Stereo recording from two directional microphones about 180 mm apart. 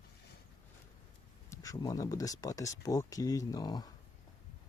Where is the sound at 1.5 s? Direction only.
20° left (ahead or behind).